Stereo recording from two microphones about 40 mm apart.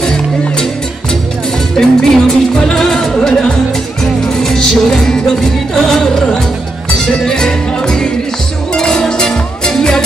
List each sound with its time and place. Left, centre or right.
1.8 s music: centre